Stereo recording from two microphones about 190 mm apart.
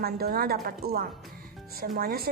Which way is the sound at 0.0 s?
55° right (ahead or behind).